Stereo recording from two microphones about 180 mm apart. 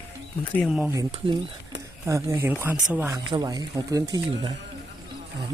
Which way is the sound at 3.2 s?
25° right (ahead or behind).